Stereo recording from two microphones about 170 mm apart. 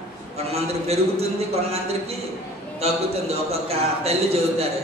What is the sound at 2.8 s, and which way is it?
A man's voice, 35° right (ahead or behind).